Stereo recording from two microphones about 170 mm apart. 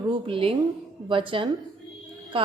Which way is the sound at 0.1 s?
30° right (ahead or behind).